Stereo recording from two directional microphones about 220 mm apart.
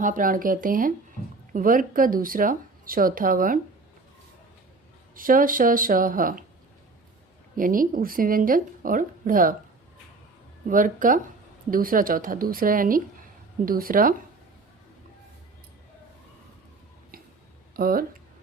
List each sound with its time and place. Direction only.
0.0 s speech: 40° right (ahead or behind)
5.1 s speech: 40° right (ahead or behind)
7.5 s speech: 40° right (ahead or behind)
10.7 s speech: 40° right (ahead or behind)
17.7 s speech: 40° right (ahead or behind)